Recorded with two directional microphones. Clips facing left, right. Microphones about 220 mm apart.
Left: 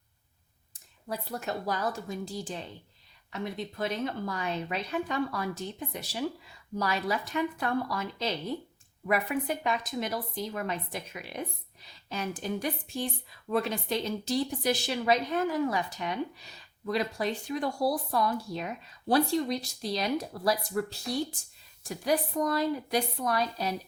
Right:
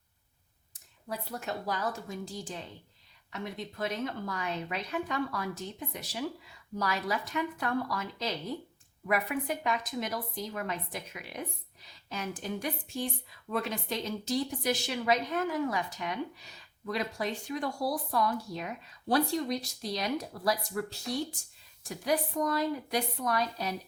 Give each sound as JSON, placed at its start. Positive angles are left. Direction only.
{"t": 0.7, "sound": "a woman's voice", "side_deg": 35}